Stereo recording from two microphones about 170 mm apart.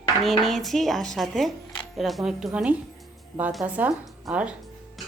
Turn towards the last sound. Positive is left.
turn(degrees=-5)  # may be behind; listen again after turning